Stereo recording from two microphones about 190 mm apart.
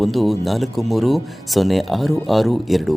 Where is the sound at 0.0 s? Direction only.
Centre (ahead or behind).